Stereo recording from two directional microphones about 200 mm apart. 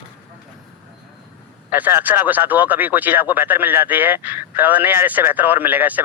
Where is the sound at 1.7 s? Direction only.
10° right (ahead or behind).